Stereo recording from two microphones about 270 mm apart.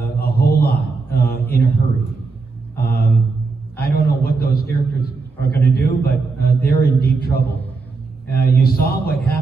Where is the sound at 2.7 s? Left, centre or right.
Left.